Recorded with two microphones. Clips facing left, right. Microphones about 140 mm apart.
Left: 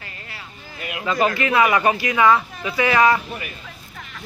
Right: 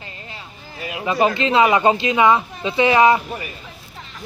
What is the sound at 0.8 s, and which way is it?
Speech, 25° right (ahead or behind).